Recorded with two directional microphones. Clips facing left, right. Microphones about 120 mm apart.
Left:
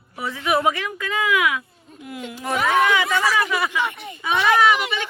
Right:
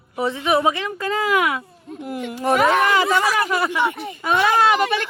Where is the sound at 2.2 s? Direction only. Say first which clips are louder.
Right 6 dB; 55° right (ahead or behind).